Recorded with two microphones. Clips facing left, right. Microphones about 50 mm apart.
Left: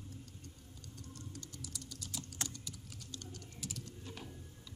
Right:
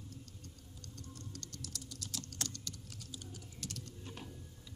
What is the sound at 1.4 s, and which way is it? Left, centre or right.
Typing, centre.